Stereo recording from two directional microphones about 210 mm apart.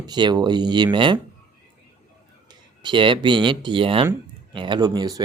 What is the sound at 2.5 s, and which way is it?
Speech, 20° right (ahead or behind).